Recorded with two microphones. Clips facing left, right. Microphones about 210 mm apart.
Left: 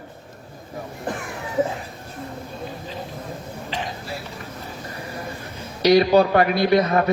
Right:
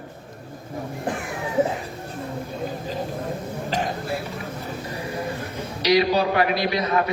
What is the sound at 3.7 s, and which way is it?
Throat clearing, 50° right (ahead or behind).